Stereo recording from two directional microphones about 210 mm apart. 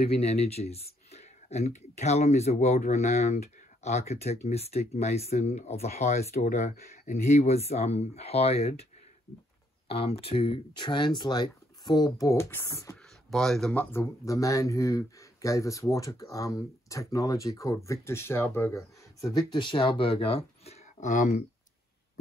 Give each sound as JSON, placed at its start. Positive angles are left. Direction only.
{"t": 0.0, "sound": "speech", "side_deg": 30}
{"t": 9.8, "sound": "speech", "side_deg": 30}
{"t": 13.3, "sound": "speech", "side_deg": 0}